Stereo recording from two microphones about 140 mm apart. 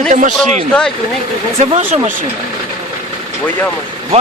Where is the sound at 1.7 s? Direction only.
50° right (ahead or behind).